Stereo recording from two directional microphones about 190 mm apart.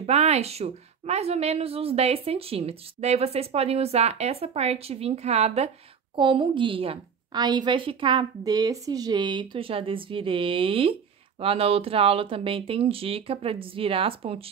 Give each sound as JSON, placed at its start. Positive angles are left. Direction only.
{"t": 0.0, "sound": "a woman's voice", "side_deg": -35}